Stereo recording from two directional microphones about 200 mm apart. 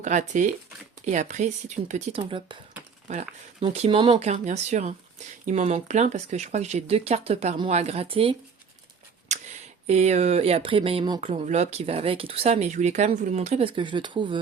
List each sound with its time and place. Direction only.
0.0 s speech: 40° right (ahead or behind)
3.6 s speech: 30° right (ahead or behind)
4.3 s speech: 35° right (ahead or behind)
9.3 s a sound: 35° right (ahead or behind)
9.8 s speech: 35° right (ahead or behind)
11.3 s speech: 35° right (ahead or behind)